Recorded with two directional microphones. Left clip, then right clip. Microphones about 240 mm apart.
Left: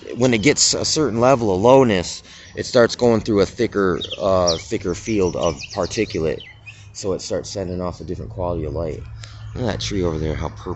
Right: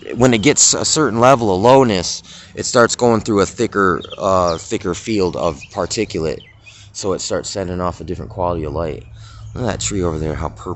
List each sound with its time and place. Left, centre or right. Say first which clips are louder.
0.1 s speech: right 3 dB; centre
6.9 s speech: right 3 dB; centre